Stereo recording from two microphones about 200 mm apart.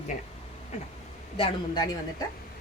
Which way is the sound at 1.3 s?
25° left (ahead or behind).